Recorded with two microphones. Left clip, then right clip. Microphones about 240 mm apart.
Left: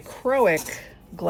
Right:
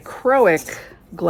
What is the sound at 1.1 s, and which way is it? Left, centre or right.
Speech, right.